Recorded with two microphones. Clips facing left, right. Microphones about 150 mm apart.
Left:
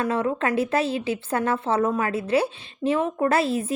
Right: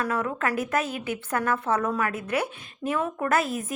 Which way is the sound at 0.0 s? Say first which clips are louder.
Left 4 dB; 25° left (ahead or behind).